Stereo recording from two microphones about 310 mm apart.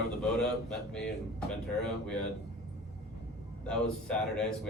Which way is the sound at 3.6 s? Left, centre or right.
Centre.